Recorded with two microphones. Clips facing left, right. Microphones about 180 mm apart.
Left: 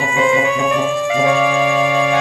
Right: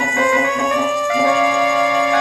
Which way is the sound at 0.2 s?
15° left (ahead or behind).